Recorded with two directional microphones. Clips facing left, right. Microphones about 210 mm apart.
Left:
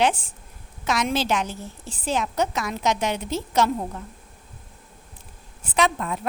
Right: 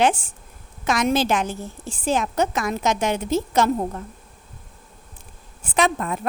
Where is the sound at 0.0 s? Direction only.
45° right (ahead or behind).